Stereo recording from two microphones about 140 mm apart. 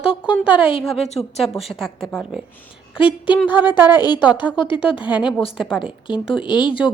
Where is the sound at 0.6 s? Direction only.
40° left (ahead or behind).